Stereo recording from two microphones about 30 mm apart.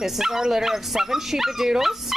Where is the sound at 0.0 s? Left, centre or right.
Centre.